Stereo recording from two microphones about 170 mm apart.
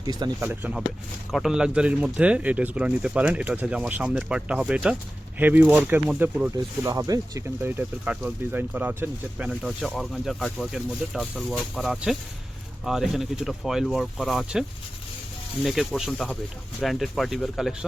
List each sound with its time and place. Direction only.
0.0 s speech: 25° right (ahead or behind)
0.3 s speech: 10° right (ahead or behind)
6.8 s speech: 20° right (ahead or behind); by 14.6 s centre (ahead or behind)
15.6 s speech: centre (ahead or behind)